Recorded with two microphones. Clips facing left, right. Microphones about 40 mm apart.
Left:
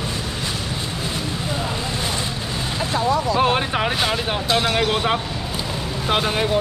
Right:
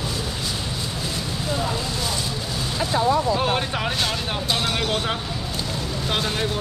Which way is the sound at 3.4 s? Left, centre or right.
Left.